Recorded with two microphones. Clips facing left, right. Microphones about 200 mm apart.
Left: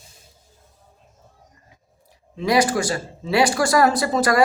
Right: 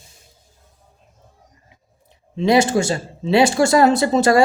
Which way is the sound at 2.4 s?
25° right (ahead or behind).